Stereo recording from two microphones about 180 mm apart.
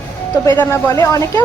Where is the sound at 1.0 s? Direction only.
15° left (ahead or behind).